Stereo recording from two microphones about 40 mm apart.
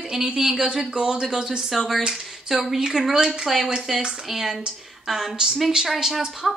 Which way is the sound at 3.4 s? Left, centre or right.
Centre.